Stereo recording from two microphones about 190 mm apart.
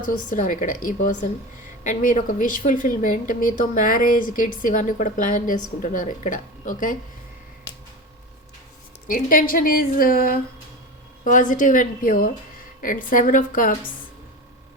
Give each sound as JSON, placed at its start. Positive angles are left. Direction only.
{"t": 0.3, "sound": "a woman's voice", "side_deg": 45}
{"t": 9.0, "sound": "a woman's voice", "side_deg": 45}